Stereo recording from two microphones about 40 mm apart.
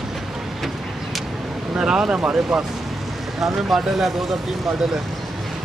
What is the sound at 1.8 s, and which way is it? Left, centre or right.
Speech, right.